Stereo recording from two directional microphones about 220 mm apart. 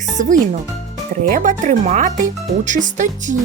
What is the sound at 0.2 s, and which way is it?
Speech, 35° right (ahead or behind).